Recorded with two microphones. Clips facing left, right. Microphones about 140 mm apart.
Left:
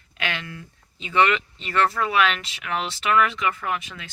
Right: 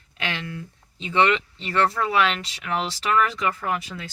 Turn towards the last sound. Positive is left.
turn(degrees=-35)  # may be behind; listen again after turning